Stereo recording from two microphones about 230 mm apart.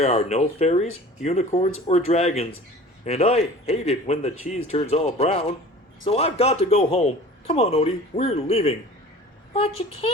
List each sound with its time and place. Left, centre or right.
0.0 s a man's voice: left